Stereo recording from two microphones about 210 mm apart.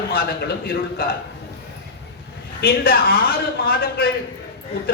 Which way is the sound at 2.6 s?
45° left (ahead or behind).